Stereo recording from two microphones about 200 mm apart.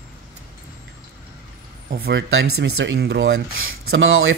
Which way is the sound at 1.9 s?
60° right (ahead or behind).